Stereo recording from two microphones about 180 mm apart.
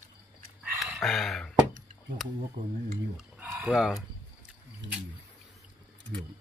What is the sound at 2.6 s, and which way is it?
Speech, 25° right (ahead or behind).